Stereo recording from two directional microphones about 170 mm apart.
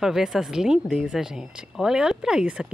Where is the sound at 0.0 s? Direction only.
Centre (ahead or behind).